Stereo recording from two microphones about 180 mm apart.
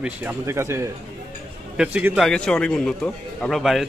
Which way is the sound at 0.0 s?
10° right (ahead or behind).